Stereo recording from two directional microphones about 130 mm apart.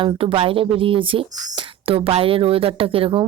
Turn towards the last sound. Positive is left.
turn(degrees=-45)  # may be behind; listen again after turning